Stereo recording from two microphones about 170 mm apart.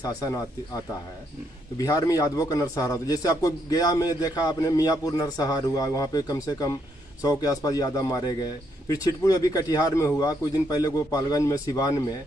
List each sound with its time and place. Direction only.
0.0 s a man's voice: 20° left (ahead or behind)
1.8 s a man's voice: 20° left (ahead or behind)